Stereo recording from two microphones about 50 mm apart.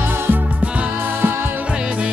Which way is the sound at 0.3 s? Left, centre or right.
Right.